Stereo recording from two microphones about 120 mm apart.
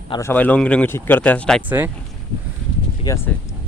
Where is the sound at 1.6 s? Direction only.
15° right (ahead or behind).